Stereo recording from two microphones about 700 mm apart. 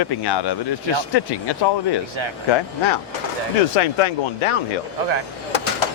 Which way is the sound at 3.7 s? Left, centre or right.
Left.